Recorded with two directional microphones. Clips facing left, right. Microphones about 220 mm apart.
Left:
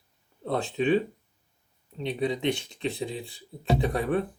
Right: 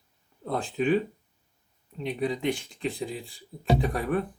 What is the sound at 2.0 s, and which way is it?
Speech, 25° left (ahead or behind).